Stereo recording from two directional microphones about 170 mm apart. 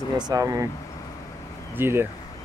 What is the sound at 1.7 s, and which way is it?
Speech, 15° right (ahead or behind).